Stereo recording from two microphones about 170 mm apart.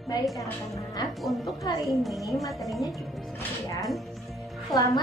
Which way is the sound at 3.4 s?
20° left (ahead or behind).